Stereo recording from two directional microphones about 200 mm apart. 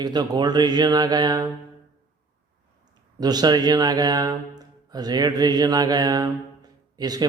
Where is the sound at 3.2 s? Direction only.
20° right (ahead or behind).